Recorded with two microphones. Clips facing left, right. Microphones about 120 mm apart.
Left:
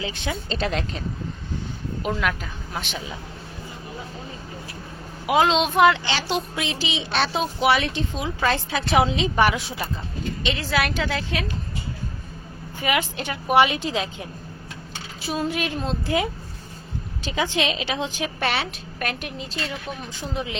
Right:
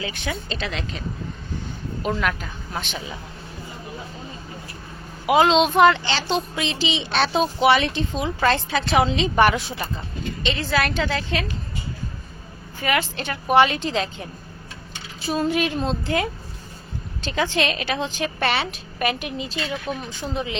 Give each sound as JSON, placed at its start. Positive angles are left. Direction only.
{"t": 0.0, "sound": "a woman's voice", "side_deg": 25}
{"t": 0.5, "sound": "a woman's voice", "side_deg": 45}
{"t": 2.0, "sound": "speech", "side_deg": 5}
{"t": 5.2, "sound": "a woman's voice", "side_deg": 0}
{"t": 12.8, "sound": "a woman's voice", "side_deg": 15}
{"t": 15.3, "sound": "speech", "side_deg": 5}
{"t": 17.2, "sound": "speech", "side_deg": 10}